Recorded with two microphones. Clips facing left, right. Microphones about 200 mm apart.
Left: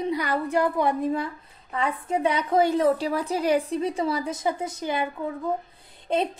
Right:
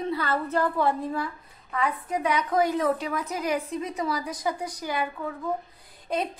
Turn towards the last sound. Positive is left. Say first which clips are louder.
# left 4 dB
turn(degrees=25)  # may be behind; listen again after turning